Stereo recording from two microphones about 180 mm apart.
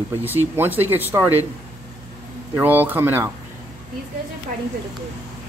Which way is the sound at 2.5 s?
10° right (ahead or behind).